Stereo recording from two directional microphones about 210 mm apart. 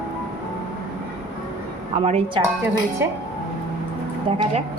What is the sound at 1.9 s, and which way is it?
Speech, 25° right (ahead or behind).